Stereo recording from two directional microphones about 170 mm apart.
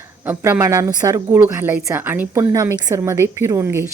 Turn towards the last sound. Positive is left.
turn(degrees=-15)  # may be behind; listen again after turning